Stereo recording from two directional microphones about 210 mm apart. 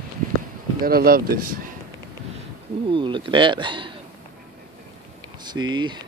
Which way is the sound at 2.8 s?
25° right (ahead or behind).